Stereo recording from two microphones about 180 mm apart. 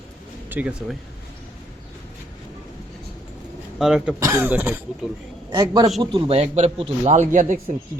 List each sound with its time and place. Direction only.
0.5 s speech: 5° right (ahead or behind)
3.8 s speech: 5° right (ahead or behind)
5.5 s a man's voice: 20° right (ahead or behind); by 7.6 s 45° right (ahead or behind)